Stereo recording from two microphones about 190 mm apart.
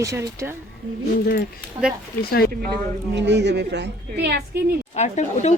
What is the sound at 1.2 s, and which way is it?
Speech, 55° left (ahead or behind).